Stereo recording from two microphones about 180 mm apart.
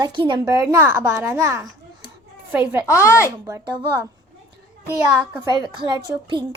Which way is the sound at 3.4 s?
15° right (ahead or behind).